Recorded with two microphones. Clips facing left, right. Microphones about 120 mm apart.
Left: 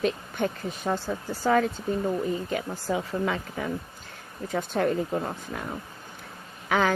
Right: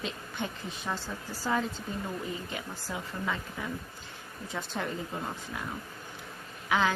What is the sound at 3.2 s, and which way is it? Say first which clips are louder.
Speech: left 6 dB; 70° left (ahead or behind).